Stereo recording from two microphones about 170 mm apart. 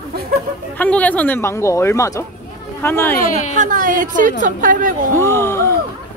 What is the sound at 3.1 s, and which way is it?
Speech, 55° left (ahead or behind).